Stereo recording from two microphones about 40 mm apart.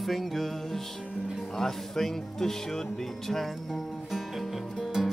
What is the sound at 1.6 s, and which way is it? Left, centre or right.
Speech, centre.